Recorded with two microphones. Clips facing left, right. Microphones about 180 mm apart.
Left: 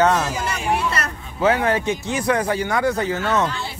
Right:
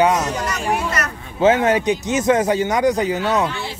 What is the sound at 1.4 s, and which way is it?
A man's voice, 20° right (ahead or behind).